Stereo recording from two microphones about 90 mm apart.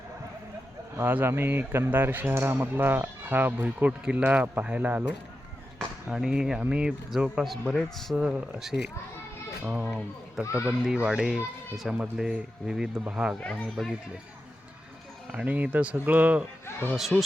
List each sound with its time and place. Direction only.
0.9 s speech: 25° right (ahead or behind)
6.1 s speech: 5° right (ahead or behind)
9.6 s speech: 15° right (ahead or behind)
13.4 s speech: 10° left (ahead or behind)
15.3 s speech: 20° right (ahead or behind)
16.9 s speech: 5° right (ahead or behind)